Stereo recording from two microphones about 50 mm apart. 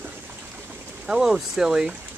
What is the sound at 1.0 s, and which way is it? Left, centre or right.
Speech, centre.